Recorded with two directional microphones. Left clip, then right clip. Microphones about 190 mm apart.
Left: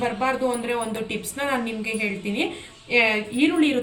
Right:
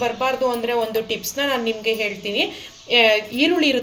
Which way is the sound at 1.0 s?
45° right (ahead or behind).